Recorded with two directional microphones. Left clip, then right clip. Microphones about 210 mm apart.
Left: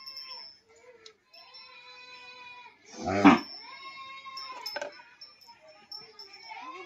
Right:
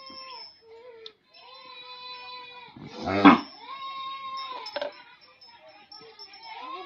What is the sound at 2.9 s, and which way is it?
Dog, 40° left (ahead or behind).